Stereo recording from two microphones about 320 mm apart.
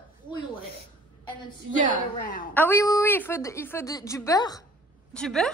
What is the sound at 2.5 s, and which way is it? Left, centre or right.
A woman's voice, centre.